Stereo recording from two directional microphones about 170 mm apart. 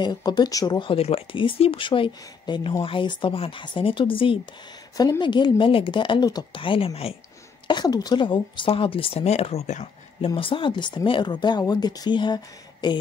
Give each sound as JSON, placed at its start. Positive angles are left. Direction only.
{"t": 0.0, "sound": "speech", "side_deg": 25}
{"t": 7.6, "sound": "speech", "side_deg": 25}